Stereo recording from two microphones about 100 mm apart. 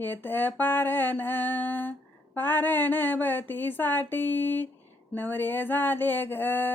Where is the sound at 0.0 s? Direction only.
20° left (ahead or behind).